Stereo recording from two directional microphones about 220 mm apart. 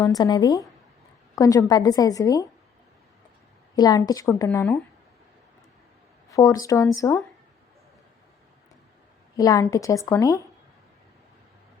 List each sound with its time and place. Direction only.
0.0 s a woman's voice: 15° left (ahead or behind)
3.8 s a woman's voice: 15° left (ahead or behind)
6.3 s a woman's voice: 15° left (ahead or behind)
9.3 s a woman's voice: 15° left (ahead or behind)